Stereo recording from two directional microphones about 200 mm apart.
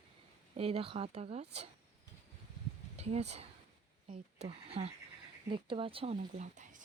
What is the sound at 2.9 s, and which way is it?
Speech, 30° right (ahead or behind).